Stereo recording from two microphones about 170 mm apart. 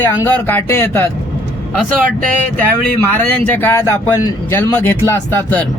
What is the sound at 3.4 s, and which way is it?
Speech, 10° left (ahead or behind).